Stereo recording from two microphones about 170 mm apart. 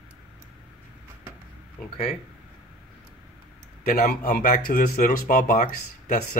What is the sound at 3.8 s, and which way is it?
Speech, 60° left (ahead or behind).